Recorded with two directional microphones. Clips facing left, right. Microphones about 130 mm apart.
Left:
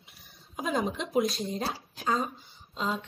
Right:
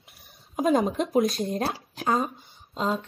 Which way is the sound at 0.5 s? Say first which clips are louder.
Right 7 dB; 45° right (ahead or behind).